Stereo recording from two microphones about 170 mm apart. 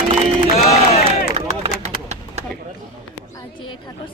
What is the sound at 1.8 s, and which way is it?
Bird, 40° right (ahead or behind).